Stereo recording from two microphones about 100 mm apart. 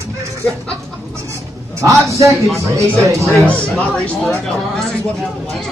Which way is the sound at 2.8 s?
30° right (ahead or behind).